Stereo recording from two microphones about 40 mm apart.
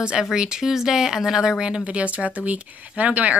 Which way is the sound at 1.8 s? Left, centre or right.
Right.